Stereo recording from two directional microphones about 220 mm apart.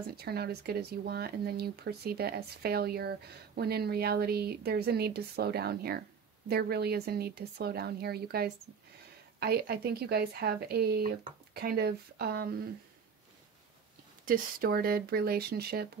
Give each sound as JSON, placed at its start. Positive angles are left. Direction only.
{"t": 0.2, "sound": "speech", "side_deg": -45}
{"t": 14.2, "sound": "speech", "side_deg": -40}